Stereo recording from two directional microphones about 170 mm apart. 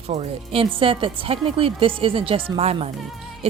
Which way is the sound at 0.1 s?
35° right (ahead or behind).